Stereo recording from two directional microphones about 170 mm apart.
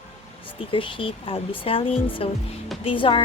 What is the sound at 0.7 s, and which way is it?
Speech, 30° left (ahead or behind).